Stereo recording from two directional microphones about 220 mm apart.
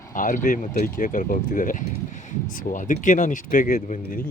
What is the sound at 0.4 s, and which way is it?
Speech, 40° left (ahead or behind).